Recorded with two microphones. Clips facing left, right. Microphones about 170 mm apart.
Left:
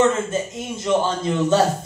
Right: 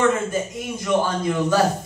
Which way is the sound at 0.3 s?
25° left (ahead or behind).